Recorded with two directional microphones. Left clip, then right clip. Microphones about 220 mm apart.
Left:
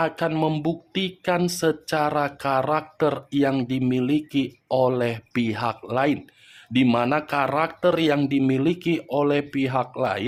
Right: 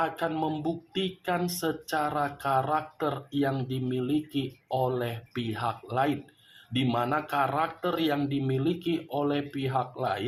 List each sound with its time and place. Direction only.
0.0 s speech: 45° left (ahead or behind)